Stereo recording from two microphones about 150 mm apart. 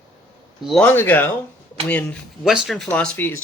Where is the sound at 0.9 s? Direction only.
10° left (ahead or behind).